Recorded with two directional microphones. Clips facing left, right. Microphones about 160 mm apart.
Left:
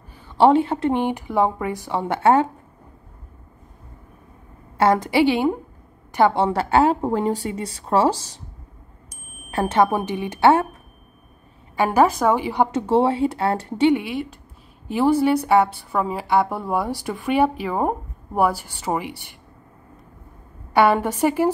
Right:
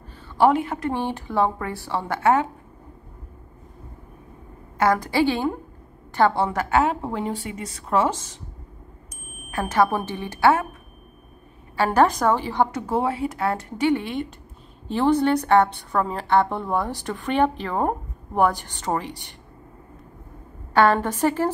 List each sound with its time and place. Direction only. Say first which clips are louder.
0.3 s a woman's voice: left 3 dB; 25° left (ahead or behind)
4.7 s a woman's voice: left 3 dB; 25° left (ahead or behind)
9.5 s speech: left 2 dB; 30° left (ahead or behind)
9.8 s a woman's voice: left 3 dB; 15° left (ahead or behind)
11.7 s a woman's voice: left 1 dB; 10° left (ahead or behind)
12.8 s speech: left 6 dB; 25° left (ahead or behind)
13.9 s a woman's voice: left 2 dB; 10° left (ahead or behind)
20.7 s a woman's voice: left 1 dB; 10° left (ahead or behind)